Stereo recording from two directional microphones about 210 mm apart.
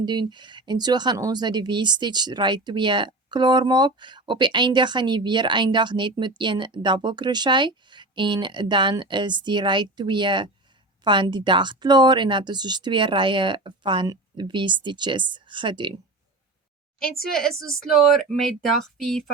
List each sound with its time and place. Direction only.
0.0 s speech: 20° right (ahead or behind)
17.2 s speech: centre (ahead or behind)